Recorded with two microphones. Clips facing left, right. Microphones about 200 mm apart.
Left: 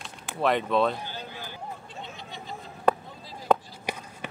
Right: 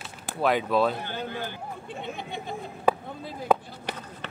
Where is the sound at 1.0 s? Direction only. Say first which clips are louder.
Right 6 dB; 55° right (ahead or behind).